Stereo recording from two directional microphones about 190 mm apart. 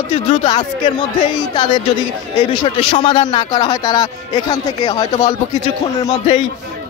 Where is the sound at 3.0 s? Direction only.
25° left (ahead or behind).